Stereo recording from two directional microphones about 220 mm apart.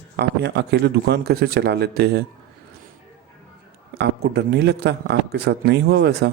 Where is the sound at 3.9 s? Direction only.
50° right (ahead or behind).